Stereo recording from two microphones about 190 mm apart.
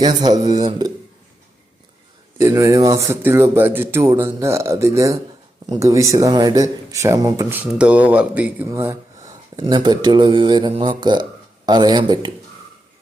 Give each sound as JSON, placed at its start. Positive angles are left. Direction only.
{"t": 0.0, "sound": "speech", "side_deg": -20}
{"t": 2.4, "sound": "speech", "side_deg": -15}
{"t": 7.6, "sound": "speech", "side_deg": -5}